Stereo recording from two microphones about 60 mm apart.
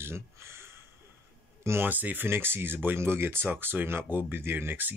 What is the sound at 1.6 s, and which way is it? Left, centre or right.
Speech, right.